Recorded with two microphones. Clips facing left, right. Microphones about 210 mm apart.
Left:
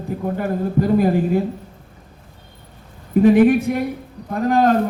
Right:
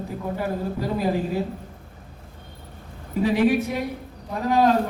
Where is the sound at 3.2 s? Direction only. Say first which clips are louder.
Left 7 dB; 55° left (ahead or behind).